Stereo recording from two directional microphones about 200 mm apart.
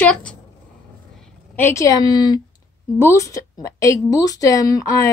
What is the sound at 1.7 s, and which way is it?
A woman's voice, 20° left (ahead or behind).